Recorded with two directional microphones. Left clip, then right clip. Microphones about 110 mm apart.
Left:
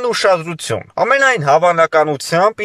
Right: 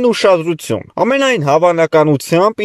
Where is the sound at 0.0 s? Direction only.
25° right (ahead or behind).